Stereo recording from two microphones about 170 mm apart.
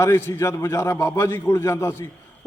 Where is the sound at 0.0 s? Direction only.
15° left (ahead or behind).